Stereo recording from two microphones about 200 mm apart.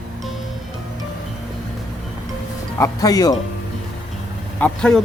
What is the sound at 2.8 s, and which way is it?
Speech, 20° left (ahead or behind).